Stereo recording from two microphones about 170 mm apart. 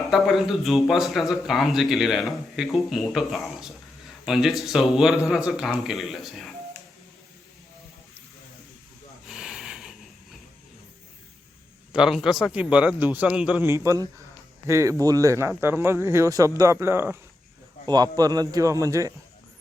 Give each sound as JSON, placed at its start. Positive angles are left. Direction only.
{"t": 0.1, "sound": "a man's voice", "side_deg": 0}
{"t": 9.2, "sound": "hiss", "side_deg": -5}
{"t": 11.9, "sound": "a man's voice", "side_deg": -5}